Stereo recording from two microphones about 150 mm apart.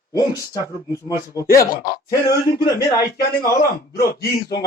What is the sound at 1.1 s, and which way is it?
Speech, 75° left (ahead or behind).